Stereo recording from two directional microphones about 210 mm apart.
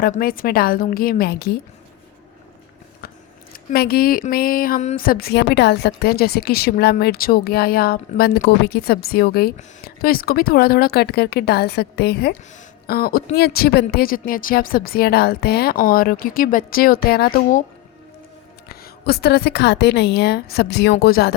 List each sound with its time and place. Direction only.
0.0 s speech: 45° left (ahead or behind)
3.0 s a sound: 45° left (ahead or behind)
3.5 s speech: 45° left (ahead or behind)
18.7 s speech: 45° left (ahead or behind)